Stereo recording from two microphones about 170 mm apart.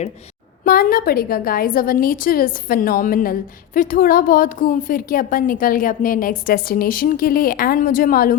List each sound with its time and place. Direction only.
0.6 s a woman's voice: 60° left (ahead or behind)